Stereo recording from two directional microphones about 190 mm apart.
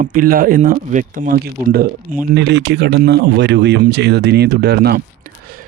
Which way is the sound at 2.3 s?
65° right (ahead or behind).